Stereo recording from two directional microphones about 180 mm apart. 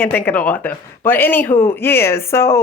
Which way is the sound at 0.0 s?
10° left (ahead or behind).